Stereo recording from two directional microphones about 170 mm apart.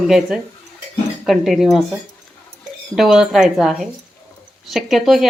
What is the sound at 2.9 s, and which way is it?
Speech, 5° right (ahead or behind).